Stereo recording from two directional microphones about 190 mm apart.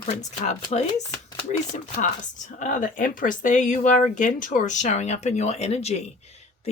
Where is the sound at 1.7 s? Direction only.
40° left (ahead or behind).